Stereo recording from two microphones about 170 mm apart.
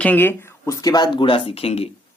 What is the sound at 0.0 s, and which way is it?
Speech, 10° left (ahead or behind).